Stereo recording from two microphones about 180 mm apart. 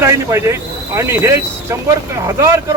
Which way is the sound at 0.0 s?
15° right (ahead or behind).